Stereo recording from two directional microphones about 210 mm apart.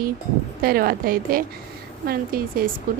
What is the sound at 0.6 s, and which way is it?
A woman's voice, 45° right (ahead or behind).